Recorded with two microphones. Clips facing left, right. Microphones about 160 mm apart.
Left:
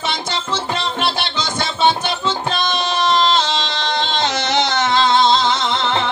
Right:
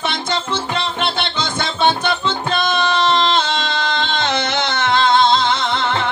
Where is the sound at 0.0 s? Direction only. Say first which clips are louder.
Right 2 dB; 55° right (ahead or behind).